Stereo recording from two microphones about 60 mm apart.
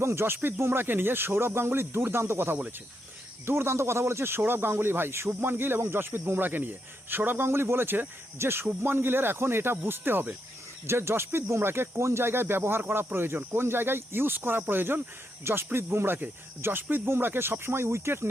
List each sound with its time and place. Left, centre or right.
0.0 s speech: right